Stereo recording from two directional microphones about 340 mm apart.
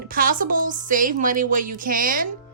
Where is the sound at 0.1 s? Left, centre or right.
Right.